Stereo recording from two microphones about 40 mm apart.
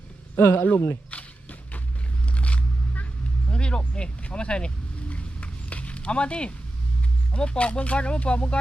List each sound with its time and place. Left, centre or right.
0.3 s speech: left
0.6 s a sound: left
3.5 s vehicle: left
7.3 s speech: left